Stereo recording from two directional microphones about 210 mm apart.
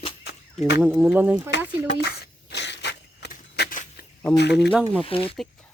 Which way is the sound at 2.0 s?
50° left (ahead or behind).